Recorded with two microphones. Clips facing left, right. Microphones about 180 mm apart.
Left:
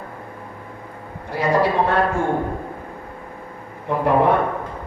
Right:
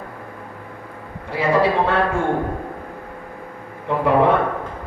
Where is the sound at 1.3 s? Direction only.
65° right (ahead or behind).